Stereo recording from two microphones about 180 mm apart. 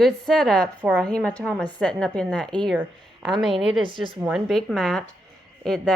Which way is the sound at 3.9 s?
30° right (ahead or behind).